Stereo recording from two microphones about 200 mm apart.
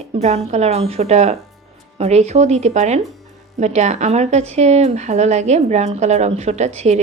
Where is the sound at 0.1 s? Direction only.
30° right (ahead or behind).